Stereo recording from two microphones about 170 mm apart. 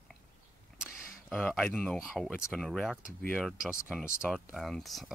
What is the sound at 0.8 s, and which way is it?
Speech, 5° left (ahead or behind).